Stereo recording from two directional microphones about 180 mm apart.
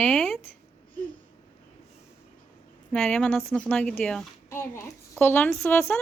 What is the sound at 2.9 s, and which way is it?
A woman's voice, 5° left (ahead or behind).